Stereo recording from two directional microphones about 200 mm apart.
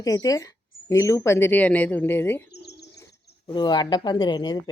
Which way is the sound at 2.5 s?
55° left (ahead or behind).